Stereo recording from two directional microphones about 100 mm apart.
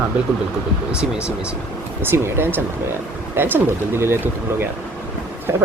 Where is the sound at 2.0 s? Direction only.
25° right (ahead or behind).